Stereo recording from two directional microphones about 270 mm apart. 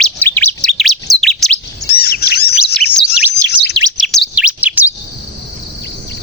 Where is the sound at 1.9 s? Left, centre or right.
Left.